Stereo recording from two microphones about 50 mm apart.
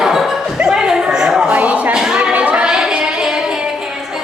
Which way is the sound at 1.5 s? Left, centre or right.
Right.